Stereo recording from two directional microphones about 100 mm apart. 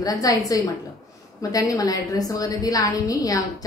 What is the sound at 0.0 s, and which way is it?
A woman's voice, 35° left (ahead or behind).